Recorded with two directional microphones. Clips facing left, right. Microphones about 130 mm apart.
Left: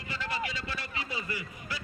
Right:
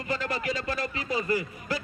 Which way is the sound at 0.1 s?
45° right (ahead or behind).